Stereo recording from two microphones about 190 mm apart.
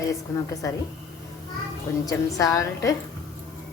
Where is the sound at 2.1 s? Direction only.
20° left (ahead or behind).